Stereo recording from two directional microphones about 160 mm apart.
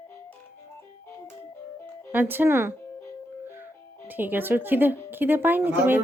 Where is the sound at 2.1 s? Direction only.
10° right (ahead or behind).